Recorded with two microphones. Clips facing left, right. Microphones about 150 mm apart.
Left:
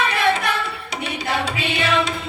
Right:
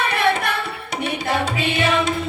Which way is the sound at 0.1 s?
55° right (ahead or behind).